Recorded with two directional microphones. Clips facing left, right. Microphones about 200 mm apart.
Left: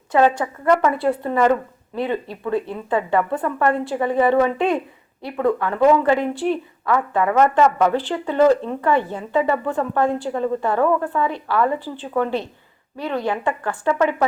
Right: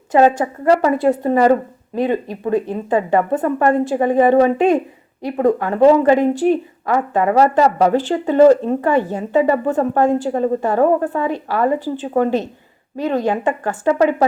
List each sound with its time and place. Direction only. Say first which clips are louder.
0.1 s speech: right 4 dB; 45° right (ahead or behind)
0.6 s a woman's voice: right 4 dB; 35° right (ahead or behind)
2.5 s speech: right 4 dB; 20° right (ahead or behind)
2.7 s speech: right 4 dB; 45° right (ahead or behind)
5.8 s a woman's voice: right 4 dB; 35° right (ahead or behind)
6.1 s speech: right 6 dB; 45° right (ahead or behind)